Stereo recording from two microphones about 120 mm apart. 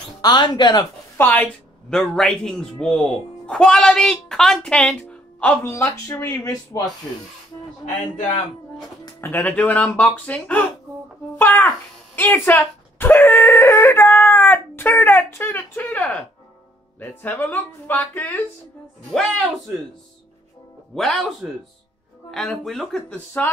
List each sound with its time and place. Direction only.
0.2 s speech: 35° left (ahead or behind)
1.1 s speech: 15° left (ahead or behind)
6.5 s speech: 30° left (ahead or behind)
9.2 s a child's voice: 15° left (ahead or behind)
19.0 s speech: centre (ahead or behind)
20.9 s speech: centre (ahead or behind)
23.1 s speech: 15° left (ahead or behind)